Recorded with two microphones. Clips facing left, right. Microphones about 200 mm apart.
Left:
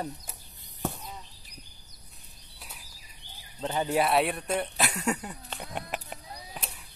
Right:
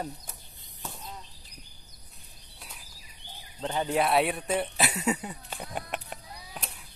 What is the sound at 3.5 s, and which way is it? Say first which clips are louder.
Speech: left 1 dB; 5° left (ahead or behind).